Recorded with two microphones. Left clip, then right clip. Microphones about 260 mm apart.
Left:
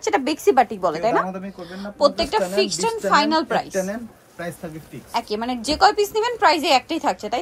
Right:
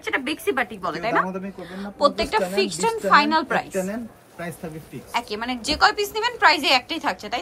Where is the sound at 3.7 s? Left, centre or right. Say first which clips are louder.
Left 2 dB; centre.